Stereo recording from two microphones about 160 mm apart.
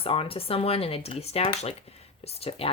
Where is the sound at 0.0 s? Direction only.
35° left (ahead or behind).